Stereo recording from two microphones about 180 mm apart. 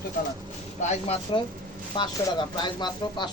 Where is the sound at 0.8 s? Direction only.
35° left (ahead or behind).